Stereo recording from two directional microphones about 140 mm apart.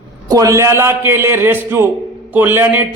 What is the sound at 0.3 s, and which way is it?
A man's voice, 25° right (ahead or behind).